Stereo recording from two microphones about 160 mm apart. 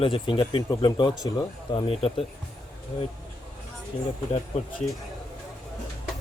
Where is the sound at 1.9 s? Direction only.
40° left (ahead or behind).